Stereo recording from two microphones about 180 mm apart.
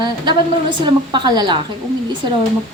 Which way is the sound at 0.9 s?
25° right (ahead or behind).